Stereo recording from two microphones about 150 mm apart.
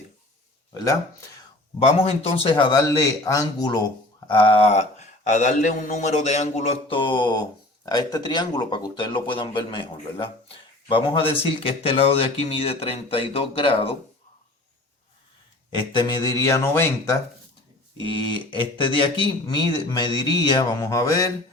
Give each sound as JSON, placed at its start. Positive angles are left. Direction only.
{"t": 1.8, "sound": "a man's voice", "side_deg": 40}
{"t": 15.7, "sound": "speech", "side_deg": 30}
{"t": 18.0, "sound": "speech", "side_deg": 30}